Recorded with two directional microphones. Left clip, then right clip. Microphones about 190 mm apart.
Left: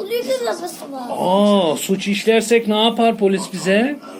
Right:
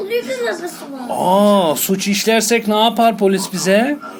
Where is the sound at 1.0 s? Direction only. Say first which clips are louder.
Right 3 dB; 45° right (ahead or behind).